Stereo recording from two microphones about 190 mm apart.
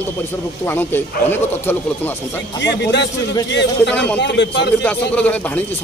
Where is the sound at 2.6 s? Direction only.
65° left (ahead or behind).